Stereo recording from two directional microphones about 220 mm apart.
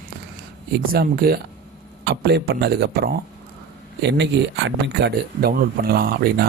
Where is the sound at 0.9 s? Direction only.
45° right (ahead or behind).